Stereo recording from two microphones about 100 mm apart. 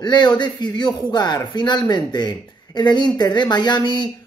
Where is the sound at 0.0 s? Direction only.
50° left (ahead or behind).